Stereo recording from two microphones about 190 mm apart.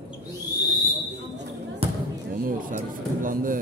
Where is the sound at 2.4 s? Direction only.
45° right (ahead or behind).